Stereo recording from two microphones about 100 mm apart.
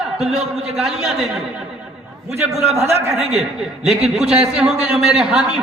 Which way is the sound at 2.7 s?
25° right (ahead or behind).